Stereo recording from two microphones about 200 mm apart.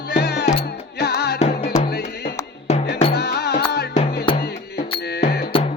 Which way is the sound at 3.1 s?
55° left (ahead or behind).